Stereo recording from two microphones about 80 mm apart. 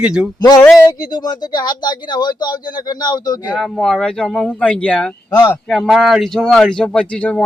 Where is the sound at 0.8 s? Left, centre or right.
Left.